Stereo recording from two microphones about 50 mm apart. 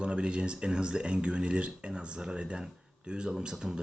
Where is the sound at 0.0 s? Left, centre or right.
Right.